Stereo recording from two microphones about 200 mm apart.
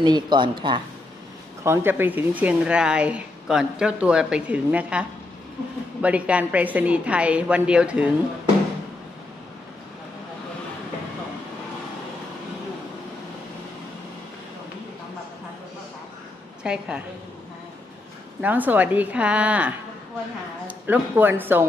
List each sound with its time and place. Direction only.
0.0 s speech: 20° right (ahead or behind)
1.6 s a woman's voice: 10° right (ahead or behind)
16.6 s speech: 5° right (ahead or behind)
18.4 s a woman's voice: 10° right (ahead or behind)